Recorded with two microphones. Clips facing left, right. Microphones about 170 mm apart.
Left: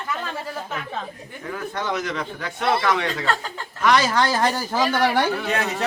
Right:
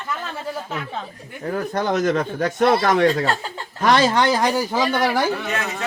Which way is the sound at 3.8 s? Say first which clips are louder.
Right 2 dB; 30° right (ahead or behind).